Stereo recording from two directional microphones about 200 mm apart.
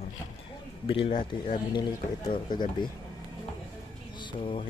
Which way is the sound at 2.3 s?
25° left (ahead or behind).